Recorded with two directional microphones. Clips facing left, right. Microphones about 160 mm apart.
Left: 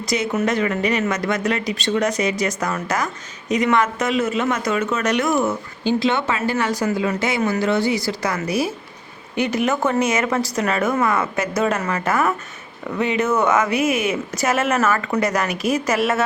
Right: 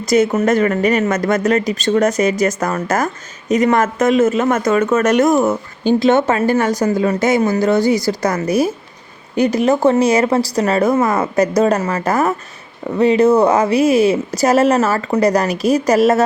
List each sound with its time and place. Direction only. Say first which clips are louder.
0.0 s speech: right 7 dB; 45° right (ahead or behind)